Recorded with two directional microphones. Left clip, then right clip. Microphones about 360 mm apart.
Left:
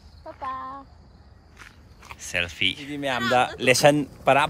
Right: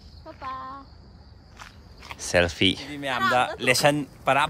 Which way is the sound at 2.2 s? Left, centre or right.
Centre.